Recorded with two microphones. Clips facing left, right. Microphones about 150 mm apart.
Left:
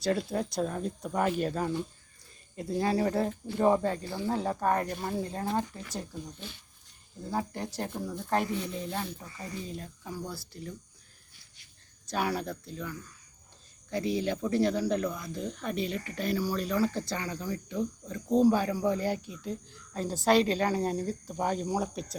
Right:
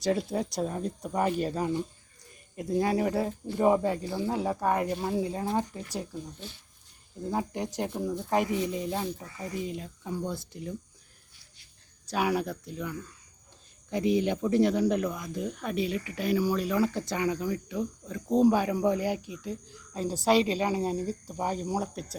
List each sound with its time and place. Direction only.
0.0 s speech: 15° right (ahead or behind)
7.3 s speech: 15° right (ahead or behind)
12.1 s speech: 10° right (ahead or behind)